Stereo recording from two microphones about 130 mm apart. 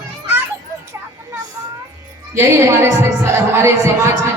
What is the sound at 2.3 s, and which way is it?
Speech, 20° right (ahead or behind).